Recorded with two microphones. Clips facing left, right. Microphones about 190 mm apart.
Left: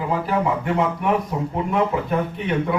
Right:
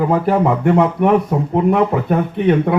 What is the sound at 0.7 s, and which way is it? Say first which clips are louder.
Speech: right 7 dB; 60° right (ahead or behind).